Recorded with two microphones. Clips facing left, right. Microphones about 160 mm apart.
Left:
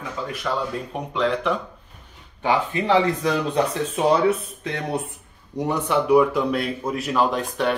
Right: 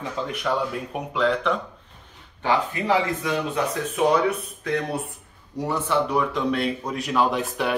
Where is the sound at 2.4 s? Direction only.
20° left (ahead or behind); by 7.7 s 5° right (ahead or behind).